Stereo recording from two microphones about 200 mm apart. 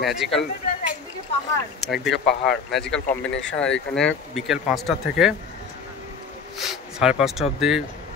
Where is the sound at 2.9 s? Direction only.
65° left (ahead or behind).